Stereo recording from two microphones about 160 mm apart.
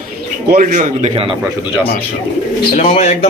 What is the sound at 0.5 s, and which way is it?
Speech, 50° right (ahead or behind).